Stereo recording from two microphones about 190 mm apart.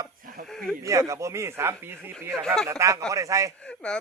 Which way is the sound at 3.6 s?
5° left (ahead or behind).